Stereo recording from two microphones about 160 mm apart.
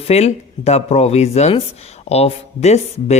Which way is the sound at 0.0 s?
40° left (ahead or behind).